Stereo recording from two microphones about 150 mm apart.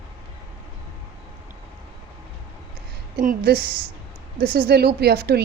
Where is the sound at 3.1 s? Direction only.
90° right.